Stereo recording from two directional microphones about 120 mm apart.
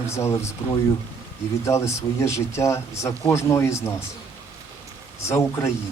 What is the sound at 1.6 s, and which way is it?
Speech, 25° left (ahead or behind).